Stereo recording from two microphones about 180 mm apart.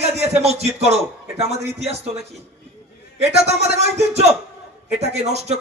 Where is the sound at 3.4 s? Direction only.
35° right (ahead or behind).